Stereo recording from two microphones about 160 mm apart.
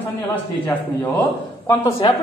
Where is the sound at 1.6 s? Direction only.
15° left (ahead or behind).